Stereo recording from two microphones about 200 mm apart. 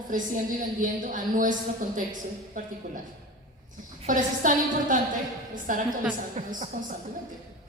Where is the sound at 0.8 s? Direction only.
40° right (ahead or behind).